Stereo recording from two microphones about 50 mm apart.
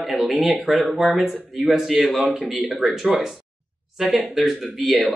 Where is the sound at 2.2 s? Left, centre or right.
Centre.